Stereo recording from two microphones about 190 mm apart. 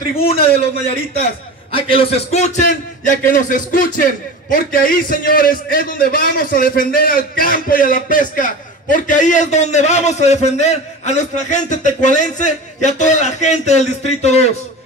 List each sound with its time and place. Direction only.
0.2 s a man's voice: 30° left (ahead or behind)
1.7 s a man's voice: 30° left (ahead or behind)